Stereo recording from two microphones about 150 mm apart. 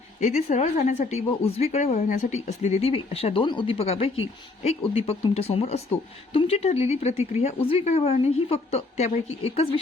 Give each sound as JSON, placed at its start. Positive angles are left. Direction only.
{"t": 0.2, "sound": "speech", "side_deg": 50}